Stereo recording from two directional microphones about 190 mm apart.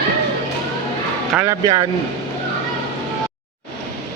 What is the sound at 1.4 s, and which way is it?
Speech, 15° right (ahead or behind).